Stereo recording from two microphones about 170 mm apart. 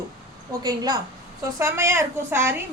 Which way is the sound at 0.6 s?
20° right (ahead or behind).